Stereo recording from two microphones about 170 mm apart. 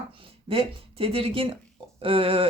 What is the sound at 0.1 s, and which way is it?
A woman's voice, 30° right (ahead or behind).